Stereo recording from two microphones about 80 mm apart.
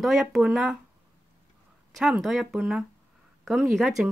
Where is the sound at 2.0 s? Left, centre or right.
Centre.